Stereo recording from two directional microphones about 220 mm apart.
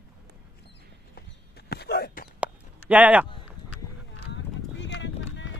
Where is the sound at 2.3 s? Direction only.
5° right (ahead or behind).